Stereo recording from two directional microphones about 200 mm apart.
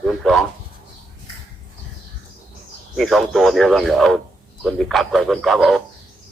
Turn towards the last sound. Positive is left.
turn(degrees=0)  # may be behind; listen again after turning